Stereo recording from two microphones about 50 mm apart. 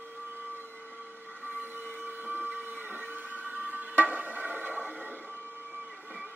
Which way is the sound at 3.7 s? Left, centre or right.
Right.